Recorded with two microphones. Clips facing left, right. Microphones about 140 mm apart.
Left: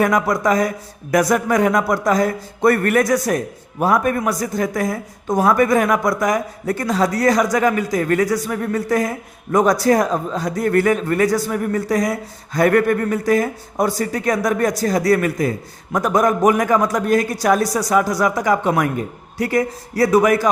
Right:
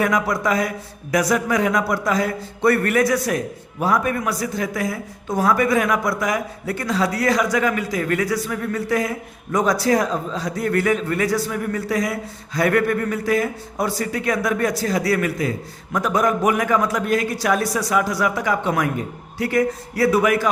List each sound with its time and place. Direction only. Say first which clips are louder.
0.0 s a man's voice: left 3 dB; 45° left (ahead or behind)